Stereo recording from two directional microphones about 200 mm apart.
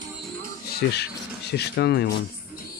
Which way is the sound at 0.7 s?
55° left (ahead or behind).